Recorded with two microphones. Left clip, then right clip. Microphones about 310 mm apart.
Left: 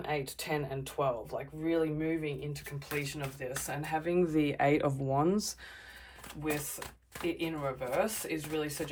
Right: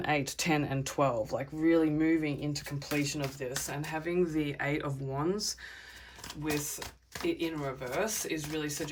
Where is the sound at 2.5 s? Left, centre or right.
Centre.